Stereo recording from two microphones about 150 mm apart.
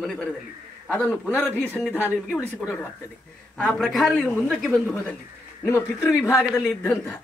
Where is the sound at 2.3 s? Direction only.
10° left (ahead or behind).